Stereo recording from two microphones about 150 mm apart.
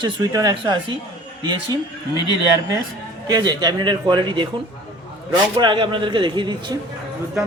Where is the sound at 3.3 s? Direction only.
25° right (ahead or behind).